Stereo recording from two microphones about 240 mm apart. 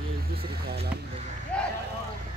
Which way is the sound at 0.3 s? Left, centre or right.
Right.